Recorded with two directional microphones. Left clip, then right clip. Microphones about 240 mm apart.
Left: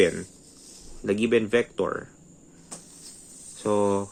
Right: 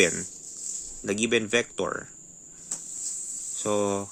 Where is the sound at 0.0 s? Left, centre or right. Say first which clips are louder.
Left 1 dB; right.